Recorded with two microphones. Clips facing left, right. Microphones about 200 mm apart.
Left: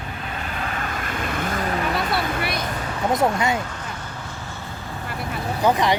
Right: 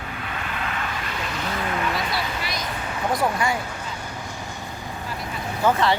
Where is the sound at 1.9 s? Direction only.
55° left (ahead or behind).